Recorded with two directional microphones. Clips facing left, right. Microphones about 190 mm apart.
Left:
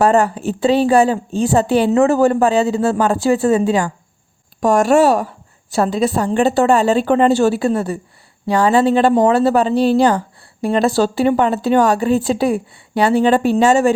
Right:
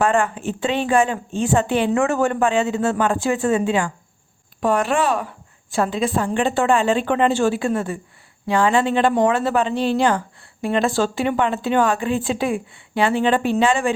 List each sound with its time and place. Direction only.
0.0 s speech: 40° left (ahead or behind)